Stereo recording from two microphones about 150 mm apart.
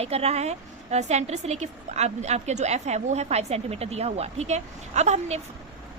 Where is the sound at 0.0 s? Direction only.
45° right (ahead or behind).